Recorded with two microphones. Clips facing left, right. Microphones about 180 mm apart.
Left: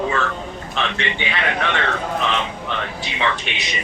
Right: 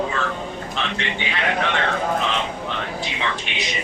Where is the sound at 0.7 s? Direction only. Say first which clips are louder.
Left 4 dB; 70° left (ahead or behind).